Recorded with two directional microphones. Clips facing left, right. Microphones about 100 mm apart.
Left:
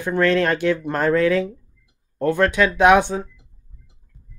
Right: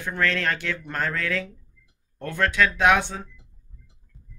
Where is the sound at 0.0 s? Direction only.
20° left (ahead or behind).